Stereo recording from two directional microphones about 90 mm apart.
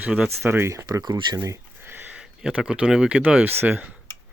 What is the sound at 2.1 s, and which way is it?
Speech, 10° right (ahead or behind).